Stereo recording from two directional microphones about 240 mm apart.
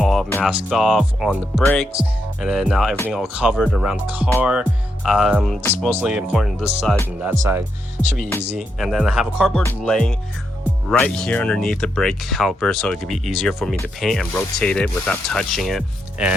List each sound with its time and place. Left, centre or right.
0.0 s music: centre
0.7 s speech: centre
8.0 s speech: centre
8.5 s speech: centre